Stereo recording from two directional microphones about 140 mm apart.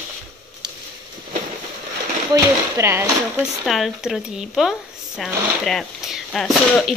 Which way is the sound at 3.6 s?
Centre (ahead or behind).